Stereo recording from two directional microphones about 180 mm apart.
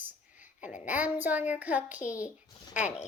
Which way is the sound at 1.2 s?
10° right (ahead or behind).